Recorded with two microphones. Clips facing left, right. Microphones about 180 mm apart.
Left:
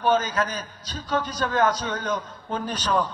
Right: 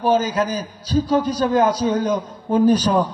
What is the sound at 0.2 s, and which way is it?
A man's voice, 10° right (ahead or behind).